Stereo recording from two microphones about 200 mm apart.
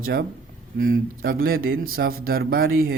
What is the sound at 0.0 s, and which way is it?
Speech, 50° right (ahead or behind).